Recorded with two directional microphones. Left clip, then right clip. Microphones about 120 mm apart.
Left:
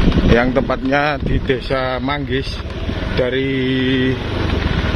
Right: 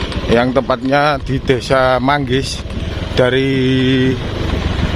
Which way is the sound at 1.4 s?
75° right (ahead or behind).